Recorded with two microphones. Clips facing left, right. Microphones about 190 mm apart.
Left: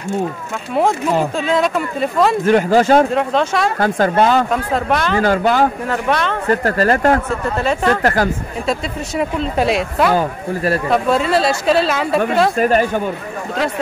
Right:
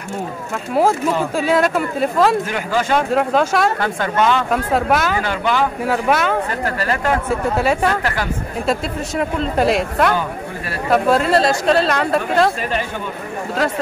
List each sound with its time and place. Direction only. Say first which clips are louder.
0.7 s speech: left 1 dB; 5° right (ahead or behind)
2.5 s speech: left 7 dB; 40° left (ahead or behind)
3.1 s speech: right 1 dB; 5° right (ahead or behind)
3.8 s speech: left 4 dB; 40° left (ahead or behind)
4.5 s speech: right 1 dB; 5° right (ahead or behind)
5.2 s speech: left 5 dB; 40° left (ahead or behind)
5.9 s speech: right 1 dB; 5° right (ahead or behind)
6.6 s speech: left 6 dB; 45° left (ahead or behind)
7.2 s speech: right 1 dB; 10° right (ahead or behind)
8.0 s speech: left 6 dB; 45° left (ahead or behind)
8.6 s speech: even; centre (ahead or behind)
10.1 s speech: left 5 dB; 40° left (ahead or behind)
10.9 s speech: right 3 dB; centre (ahead or behind)
12.5 s speech: left 8 dB; 45° left (ahead or behind)